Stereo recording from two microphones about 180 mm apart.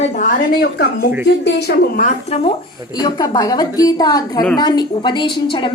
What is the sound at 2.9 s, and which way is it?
A woman's voice, 20° left (ahead or behind).